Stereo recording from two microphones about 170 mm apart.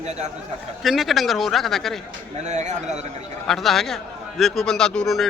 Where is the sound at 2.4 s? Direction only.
45° right (ahead or behind).